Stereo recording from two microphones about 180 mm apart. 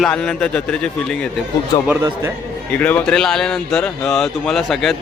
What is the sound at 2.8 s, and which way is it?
Speech, 10° left (ahead or behind).